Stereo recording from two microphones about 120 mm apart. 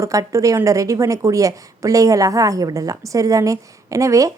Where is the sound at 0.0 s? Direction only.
25° right (ahead or behind).